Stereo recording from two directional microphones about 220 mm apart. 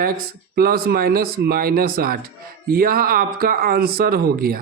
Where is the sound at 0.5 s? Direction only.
45° right (ahead or behind).